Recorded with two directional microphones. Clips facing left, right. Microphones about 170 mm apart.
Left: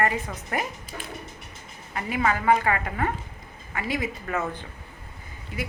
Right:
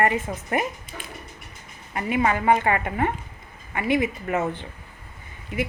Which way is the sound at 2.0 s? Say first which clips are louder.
Right 3 dB; 25° right (ahead or behind).